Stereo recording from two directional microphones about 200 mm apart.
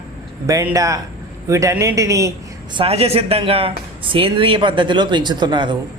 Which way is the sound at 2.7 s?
30° right (ahead or behind).